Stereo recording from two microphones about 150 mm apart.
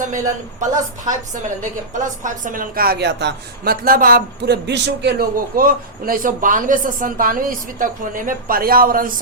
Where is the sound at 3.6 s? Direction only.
70° right (ahead or behind).